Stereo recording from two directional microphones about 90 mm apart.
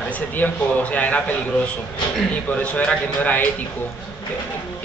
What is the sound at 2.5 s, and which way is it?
Speech, 15° left (ahead or behind).